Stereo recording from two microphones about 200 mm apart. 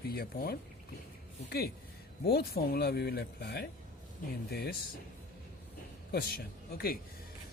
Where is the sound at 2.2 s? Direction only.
50° left (ahead or behind).